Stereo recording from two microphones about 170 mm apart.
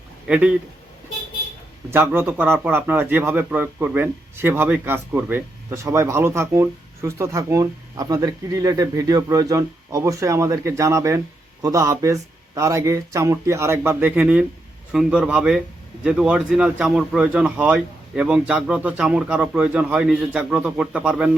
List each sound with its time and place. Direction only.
0.3 s a man's voice: 5° right (ahead or behind)
1.9 s a man's voice: 15° right (ahead or behind)